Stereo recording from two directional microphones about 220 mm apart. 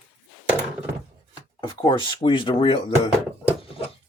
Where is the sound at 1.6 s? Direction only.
20° left (ahead or behind).